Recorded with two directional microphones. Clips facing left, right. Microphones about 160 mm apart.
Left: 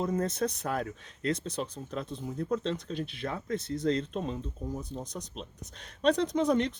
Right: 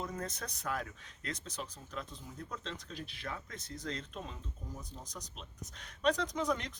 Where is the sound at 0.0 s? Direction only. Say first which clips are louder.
Left 11 dB; 30° left (ahead or behind).